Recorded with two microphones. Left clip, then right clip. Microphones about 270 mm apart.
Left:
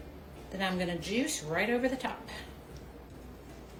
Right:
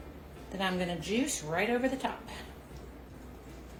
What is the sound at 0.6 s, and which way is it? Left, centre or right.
Speech, centre.